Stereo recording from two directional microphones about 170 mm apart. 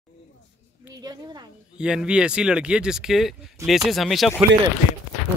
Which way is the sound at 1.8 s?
5° right (ahead or behind).